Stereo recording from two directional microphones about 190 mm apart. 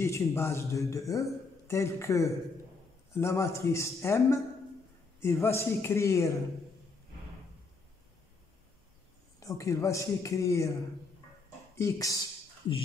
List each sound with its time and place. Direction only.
0.0 s a man's voice: 15° left (ahead or behind)
9.4 s a man's voice: 15° left (ahead or behind)
11.8 s a man's voice: 15° left (ahead or behind)